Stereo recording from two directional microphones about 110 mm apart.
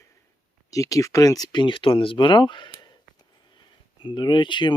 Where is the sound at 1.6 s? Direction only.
50° left (ahead or behind).